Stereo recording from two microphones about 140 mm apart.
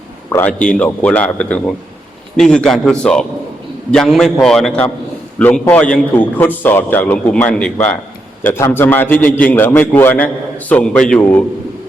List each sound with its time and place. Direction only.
0.3 s a man's voice: 15° left (ahead or behind)